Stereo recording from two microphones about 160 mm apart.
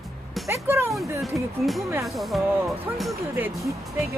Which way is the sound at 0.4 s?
15° right (ahead or behind).